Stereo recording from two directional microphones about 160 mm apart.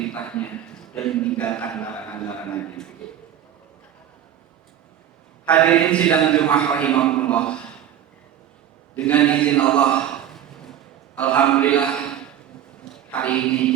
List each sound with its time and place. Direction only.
0.0 s a sound: 10° left (ahead or behind)
1.0 s a man's voice: 5° left (ahead or behind)
5.5 s a man's voice: 5° left (ahead or behind)
9.0 s a man's voice: 5° left (ahead or behind)
11.1 s a man's voice: 10° left (ahead or behind)